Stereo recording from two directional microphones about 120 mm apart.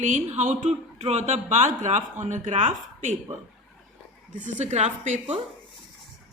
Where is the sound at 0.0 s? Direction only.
80° right.